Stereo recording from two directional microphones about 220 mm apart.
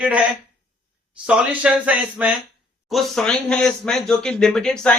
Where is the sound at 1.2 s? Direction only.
5° right (ahead or behind).